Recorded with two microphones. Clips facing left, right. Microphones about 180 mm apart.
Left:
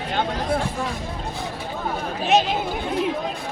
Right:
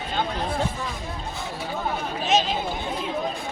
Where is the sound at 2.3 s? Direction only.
60° left (ahead or behind).